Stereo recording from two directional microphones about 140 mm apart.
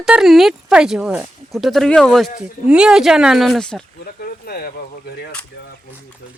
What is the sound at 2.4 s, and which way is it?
Speech, 5° right (ahead or behind).